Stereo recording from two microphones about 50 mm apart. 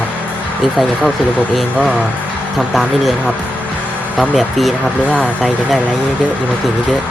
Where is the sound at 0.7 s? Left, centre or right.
Centre.